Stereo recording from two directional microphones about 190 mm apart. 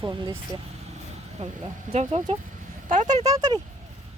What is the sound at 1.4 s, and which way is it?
Speech, 35° right (ahead or behind).